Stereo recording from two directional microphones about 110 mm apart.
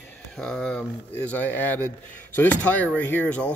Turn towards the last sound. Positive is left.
turn(degrees=10)  # may be behind; listen again after turning